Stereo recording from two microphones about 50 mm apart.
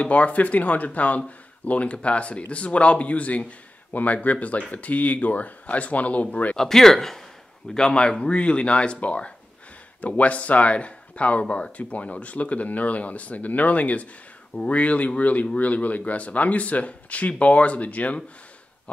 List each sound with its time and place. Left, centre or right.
0.0 s speech: left
6.5 s speech: centre; by 18.2 s left